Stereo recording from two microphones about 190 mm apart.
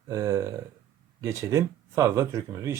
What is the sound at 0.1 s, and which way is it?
Speech, 15° right (ahead or behind).